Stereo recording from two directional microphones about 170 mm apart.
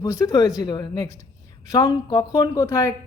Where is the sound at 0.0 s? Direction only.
20° left (ahead or behind).